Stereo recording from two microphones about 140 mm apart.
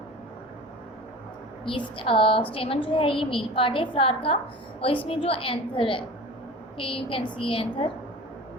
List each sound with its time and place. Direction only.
1.6 s a woman's voice: 35° left (ahead or behind)